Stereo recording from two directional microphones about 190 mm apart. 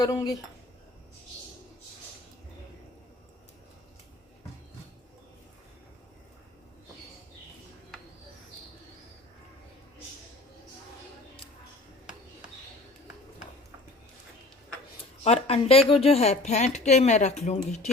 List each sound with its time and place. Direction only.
0.0 s speech: 20° left (ahead or behind)
15.2 s speech: 30° left (ahead or behind)